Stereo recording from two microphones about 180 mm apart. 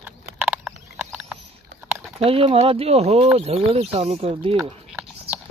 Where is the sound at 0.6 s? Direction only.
Centre (ahead or behind).